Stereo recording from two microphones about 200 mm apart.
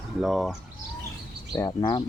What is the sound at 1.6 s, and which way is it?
Speech, 20° left (ahead or behind).